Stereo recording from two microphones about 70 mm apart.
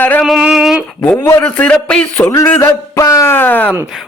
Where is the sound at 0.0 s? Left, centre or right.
Left.